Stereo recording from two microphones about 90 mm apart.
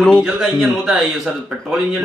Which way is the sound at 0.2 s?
5° right (ahead or behind).